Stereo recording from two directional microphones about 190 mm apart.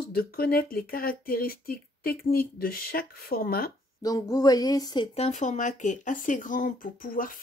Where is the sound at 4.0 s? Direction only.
20° left (ahead or behind).